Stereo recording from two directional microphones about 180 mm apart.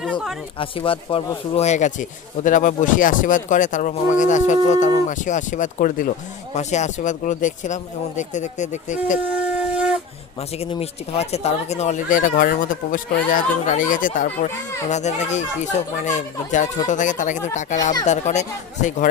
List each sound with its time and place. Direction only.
0.0 s speech: centre (ahead or behind)
0.6 s speech: 30° left (ahead or behind)
9.2 s wind instrument: 5° right (ahead or behind)
10.6 s speech: 35° left (ahead or behind)